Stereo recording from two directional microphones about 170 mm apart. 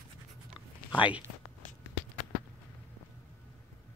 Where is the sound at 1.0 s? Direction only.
10° right (ahead or behind).